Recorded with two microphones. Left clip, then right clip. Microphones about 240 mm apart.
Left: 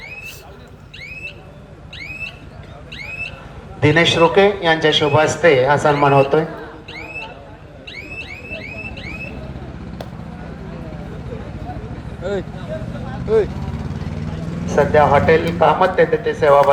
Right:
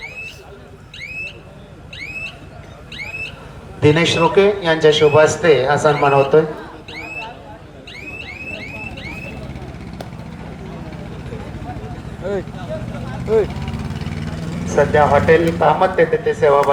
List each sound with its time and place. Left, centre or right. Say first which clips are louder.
3.8 s speech: left 1 dB; left
12.2 s vehicle: even; centre
14.8 s a man's voice: even; left